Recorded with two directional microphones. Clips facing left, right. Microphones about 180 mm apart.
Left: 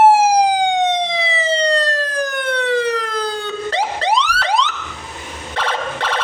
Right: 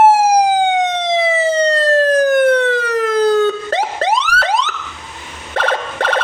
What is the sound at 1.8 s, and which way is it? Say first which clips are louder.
Emergency vehicle: right 10 dB; 45° right (ahead or behind).